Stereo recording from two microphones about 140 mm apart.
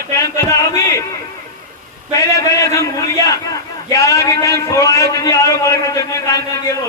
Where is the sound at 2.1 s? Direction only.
20° left (ahead or behind).